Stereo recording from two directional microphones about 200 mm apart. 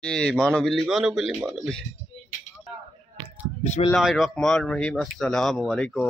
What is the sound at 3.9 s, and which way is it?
Speech, centre (ahead or behind).